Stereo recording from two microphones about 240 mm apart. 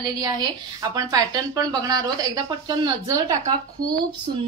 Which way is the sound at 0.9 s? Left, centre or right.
Centre.